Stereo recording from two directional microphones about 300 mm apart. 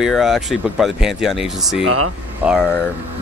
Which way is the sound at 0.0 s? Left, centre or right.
Centre.